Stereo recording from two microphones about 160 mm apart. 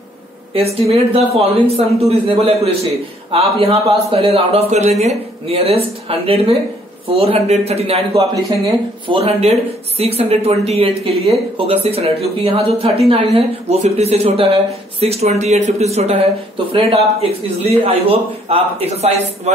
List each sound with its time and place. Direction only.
0.6 s a man's voice: 40° right (ahead or behind)